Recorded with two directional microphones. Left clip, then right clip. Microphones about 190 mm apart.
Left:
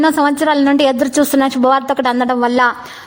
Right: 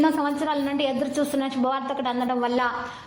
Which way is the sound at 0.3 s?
50° left (ahead or behind).